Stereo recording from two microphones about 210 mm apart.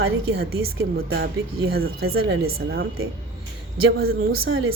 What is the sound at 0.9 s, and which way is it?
Speech, 50° right (ahead or behind).